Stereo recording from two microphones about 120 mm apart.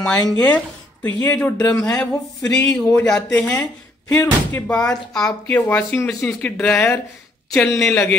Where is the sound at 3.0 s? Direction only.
5° left (ahead or behind).